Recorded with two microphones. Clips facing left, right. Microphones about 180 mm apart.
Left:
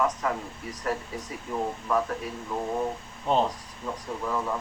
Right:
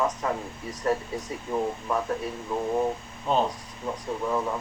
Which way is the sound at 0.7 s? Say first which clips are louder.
Right 5 dB; 30° right (ahead or behind).